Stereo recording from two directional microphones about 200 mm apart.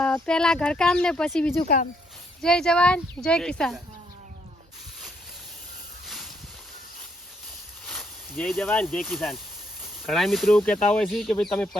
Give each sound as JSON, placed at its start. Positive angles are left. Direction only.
{"t": 0.0, "sound": "speech", "side_deg": 5}
{"t": 1.6, "sound": "speech", "side_deg": 45}
{"t": 2.4, "sound": "speech", "side_deg": 5}
{"t": 6.1, "sound": "a sound", "side_deg": 0}
{"t": 7.9, "sound": "speech", "side_deg": 5}